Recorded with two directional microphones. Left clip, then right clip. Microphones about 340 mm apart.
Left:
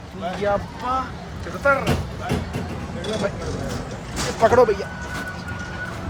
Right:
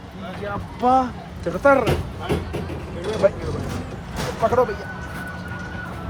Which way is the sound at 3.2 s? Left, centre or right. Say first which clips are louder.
Right 11 dB; centre.